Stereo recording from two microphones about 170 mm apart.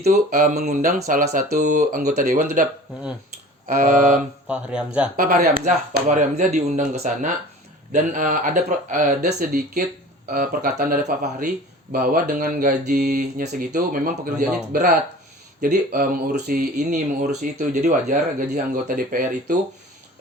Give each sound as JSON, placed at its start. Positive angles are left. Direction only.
{"t": 0.0, "sound": "speech", "side_deg": -45}
{"t": 3.7, "sound": "speech", "side_deg": -55}
{"t": 4.4, "sound": "speech", "side_deg": -5}
{"t": 5.1, "sound": "speech", "side_deg": -55}